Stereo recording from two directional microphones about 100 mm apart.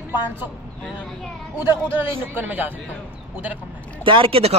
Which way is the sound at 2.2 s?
20° right (ahead or behind).